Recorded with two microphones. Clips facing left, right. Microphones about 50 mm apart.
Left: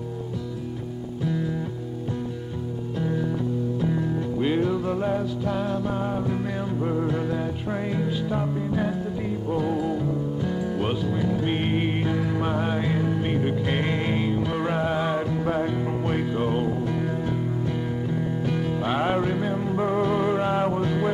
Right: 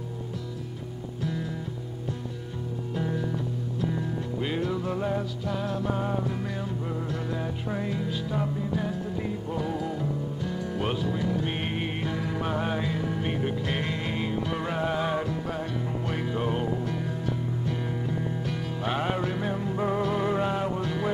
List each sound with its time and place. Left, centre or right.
4.4 s music: centre
6.9 s music: left
14.2 s music: centre
15.4 s music: left
16.2 s music: centre
18.4 s music: centre